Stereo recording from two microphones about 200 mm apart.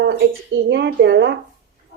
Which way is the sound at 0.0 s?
60° right (ahead or behind).